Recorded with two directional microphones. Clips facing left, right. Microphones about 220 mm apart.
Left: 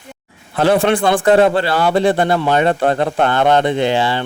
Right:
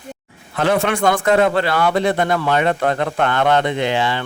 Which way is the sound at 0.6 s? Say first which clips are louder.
Left 4 dB; 30° left (ahead or behind).